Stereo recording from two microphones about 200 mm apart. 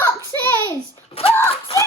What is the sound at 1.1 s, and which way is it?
Speech, 30° left (ahead or behind).